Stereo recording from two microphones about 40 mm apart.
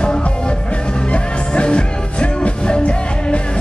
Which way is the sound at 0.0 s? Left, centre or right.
Left.